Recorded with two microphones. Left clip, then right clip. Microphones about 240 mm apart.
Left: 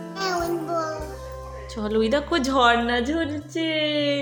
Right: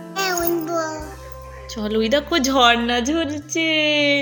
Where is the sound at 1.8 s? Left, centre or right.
Centre.